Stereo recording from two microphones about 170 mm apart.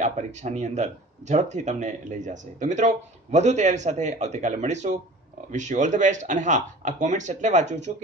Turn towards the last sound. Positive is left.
turn(degrees=-45)  # may be behind; listen again after turning